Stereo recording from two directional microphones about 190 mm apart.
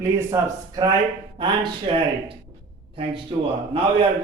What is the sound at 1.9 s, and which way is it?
Speech, 30° right (ahead or behind).